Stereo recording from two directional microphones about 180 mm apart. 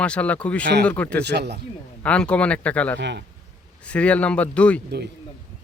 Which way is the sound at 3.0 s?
70° right (ahead or behind).